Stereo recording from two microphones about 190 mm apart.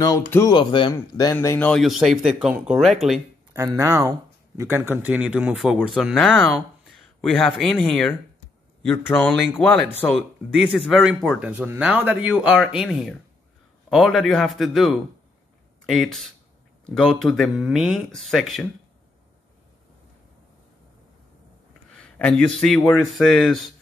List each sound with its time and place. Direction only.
0.0 s speech: 15° left (ahead or behind)
1.7 s speech: centre (ahead or behind)
3.5 s speech: 15° right (ahead or behind); by 10.2 s 15° left (ahead or behind)
10.9 s speech: centre (ahead or behind)
21.9 s speech: 5° left (ahead or behind)